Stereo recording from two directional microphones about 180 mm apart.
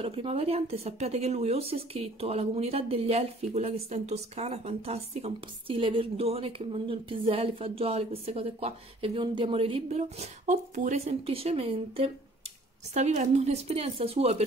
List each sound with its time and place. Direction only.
0.0 s speech: 30° right (ahead or behind)